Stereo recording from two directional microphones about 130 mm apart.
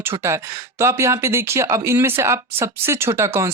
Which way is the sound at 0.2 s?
20° right (ahead or behind).